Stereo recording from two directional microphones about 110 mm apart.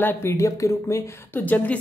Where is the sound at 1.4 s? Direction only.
15° left (ahead or behind).